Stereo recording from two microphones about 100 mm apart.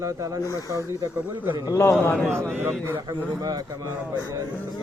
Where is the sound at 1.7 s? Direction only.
25° left (ahead or behind).